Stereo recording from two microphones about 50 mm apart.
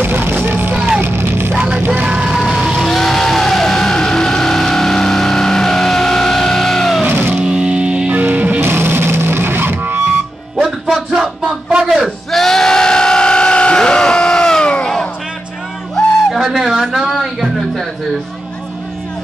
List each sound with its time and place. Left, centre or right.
0.0 s music: right
0.7 s vehicle: centre
1.0 s music: right
2.0 s a sound: centre
2.3 s a sound: centre
2.6 s music: centre
2.9 s music: centre
7.1 s music: right
7.3 s music: centre
8.2 s music: right
8.5 s music: right
10.6 s a sound: centre
12.3 s crowd: centre
16.3 s music: centre